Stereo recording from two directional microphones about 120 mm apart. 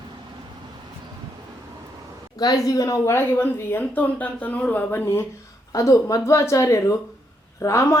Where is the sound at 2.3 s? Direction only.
35° left (ahead or behind).